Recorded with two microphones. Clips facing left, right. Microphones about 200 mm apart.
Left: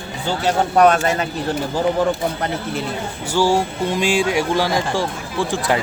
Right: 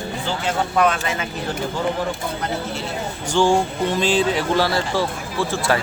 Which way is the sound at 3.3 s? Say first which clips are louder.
Even; 5° left (ahead or behind).